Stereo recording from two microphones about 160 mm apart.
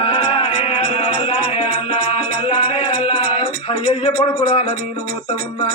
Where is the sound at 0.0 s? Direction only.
35° left (ahead or behind).